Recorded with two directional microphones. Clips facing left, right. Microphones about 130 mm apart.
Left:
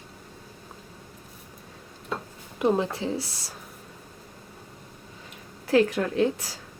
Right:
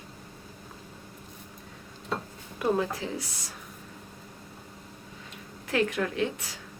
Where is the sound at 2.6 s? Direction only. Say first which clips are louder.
Left 3 dB; 25° left (ahead or behind).